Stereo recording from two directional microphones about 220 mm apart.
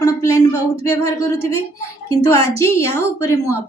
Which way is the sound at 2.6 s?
15° left (ahead or behind).